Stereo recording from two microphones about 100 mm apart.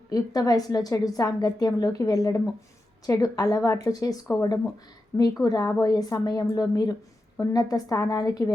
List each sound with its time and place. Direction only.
0.1 s a woman's voice: 40° left (ahead or behind)